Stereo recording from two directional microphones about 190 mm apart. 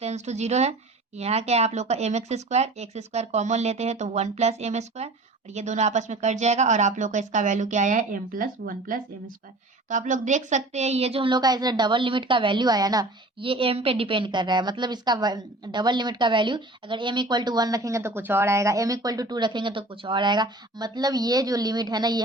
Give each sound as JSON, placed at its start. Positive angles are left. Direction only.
{"t": 0.0, "sound": "a woman's voice", "side_deg": -35}